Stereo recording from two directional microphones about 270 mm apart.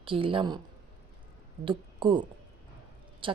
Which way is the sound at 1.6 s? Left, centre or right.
Centre.